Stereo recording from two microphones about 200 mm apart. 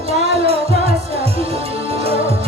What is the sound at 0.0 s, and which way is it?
Music, 30° right (ahead or behind).